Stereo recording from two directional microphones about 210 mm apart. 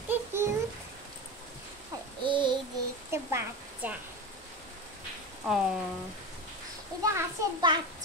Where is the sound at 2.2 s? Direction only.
20° right (ahead or behind).